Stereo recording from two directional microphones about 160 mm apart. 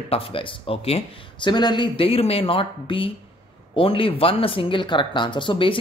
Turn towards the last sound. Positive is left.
turn(degrees=30)  # may be behind; listen again after turning